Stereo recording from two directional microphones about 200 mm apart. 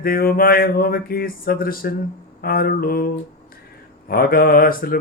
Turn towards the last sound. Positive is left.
turn(degrees=45)  # may be behind; listen again after turning